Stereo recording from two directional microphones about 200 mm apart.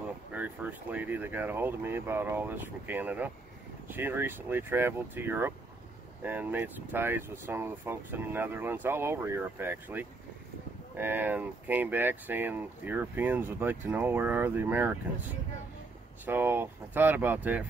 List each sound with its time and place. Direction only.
0.3 s speech: 10° right (ahead or behind)
16.3 s speech: 10° right (ahead or behind)